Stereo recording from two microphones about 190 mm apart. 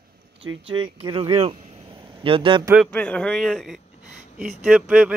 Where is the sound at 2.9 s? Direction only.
5° left (ahead or behind).